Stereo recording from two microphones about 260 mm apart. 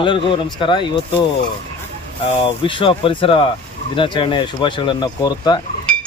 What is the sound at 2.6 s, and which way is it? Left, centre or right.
Speech, centre.